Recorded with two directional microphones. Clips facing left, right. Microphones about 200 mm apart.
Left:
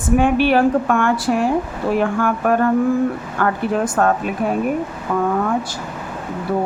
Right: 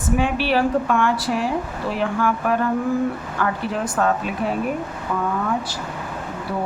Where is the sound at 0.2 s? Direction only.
50° left (ahead or behind).